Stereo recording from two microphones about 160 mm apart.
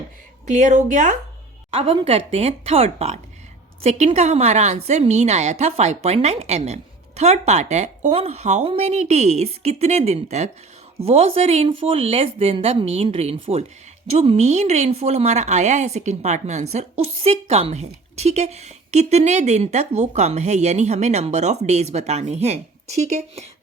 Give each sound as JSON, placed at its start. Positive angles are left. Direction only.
{"t": 0.4, "sound": "a woman's voice", "side_deg": -50}
{"t": 1.7, "sound": "a woman's voice", "side_deg": -35}